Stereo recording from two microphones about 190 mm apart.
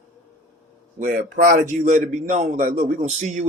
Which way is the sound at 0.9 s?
45° right (ahead or behind).